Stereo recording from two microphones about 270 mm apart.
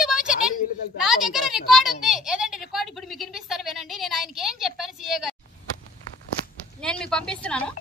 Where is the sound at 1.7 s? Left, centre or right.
Centre.